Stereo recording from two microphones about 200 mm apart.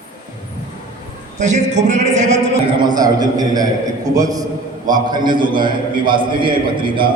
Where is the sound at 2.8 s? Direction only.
20° right (ahead or behind).